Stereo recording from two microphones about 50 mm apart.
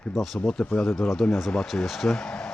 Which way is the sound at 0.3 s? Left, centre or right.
Left.